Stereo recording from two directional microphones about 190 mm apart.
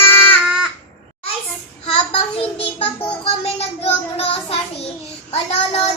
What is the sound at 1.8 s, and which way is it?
Child singing, 30° left (ahead or behind).